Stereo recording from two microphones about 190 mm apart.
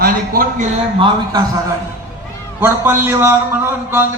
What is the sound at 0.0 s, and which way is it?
Speech, 50° right (ahead or behind).